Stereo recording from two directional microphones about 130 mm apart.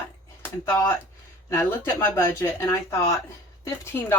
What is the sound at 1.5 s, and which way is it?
A woman's voice, 20° left (ahead or behind).